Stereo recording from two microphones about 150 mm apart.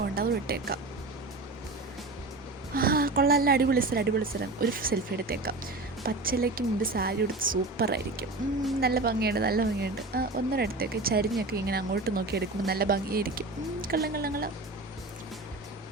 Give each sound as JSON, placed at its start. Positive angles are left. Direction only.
{"t": 0.2, "sound": "speech", "side_deg": -90}
{"t": 2.7, "sound": "speech", "side_deg": -80}
{"t": 13.8, "sound": "speech", "side_deg": -90}